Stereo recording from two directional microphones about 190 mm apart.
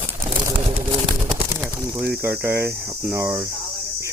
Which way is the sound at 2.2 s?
15° right (ahead or behind).